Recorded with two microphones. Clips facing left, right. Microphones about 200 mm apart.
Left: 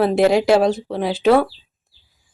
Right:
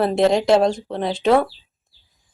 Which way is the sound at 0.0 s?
5° left (ahead or behind).